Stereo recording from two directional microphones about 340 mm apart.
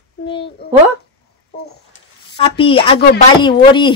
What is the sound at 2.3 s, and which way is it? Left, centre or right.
Speech, centre.